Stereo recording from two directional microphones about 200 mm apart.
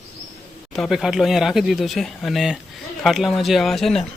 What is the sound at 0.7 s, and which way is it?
Speech, centre (ahead or behind).